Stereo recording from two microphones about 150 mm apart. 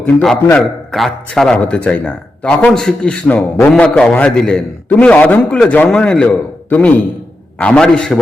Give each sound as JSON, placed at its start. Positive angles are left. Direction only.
{"t": 0.0, "sound": "a man's voice", "side_deg": 5}